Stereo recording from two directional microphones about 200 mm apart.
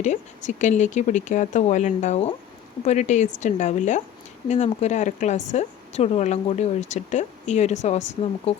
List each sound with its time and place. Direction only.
0.0 s speech: 35° left (ahead or behind)